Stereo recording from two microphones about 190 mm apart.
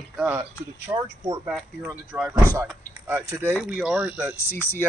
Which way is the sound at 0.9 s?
20° right (ahead or behind).